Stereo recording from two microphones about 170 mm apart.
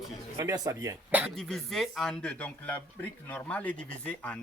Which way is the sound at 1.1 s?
10° right (ahead or behind).